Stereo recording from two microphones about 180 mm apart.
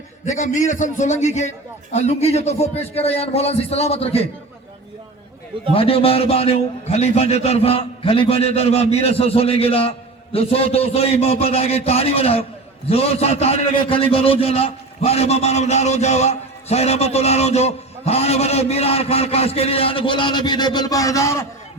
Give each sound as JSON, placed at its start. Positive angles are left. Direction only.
{"t": 0.3, "sound": "a man's voice", "side_deg": 45}
{"t": 5.7, "sound": "a man's voice", "side_deg": 30}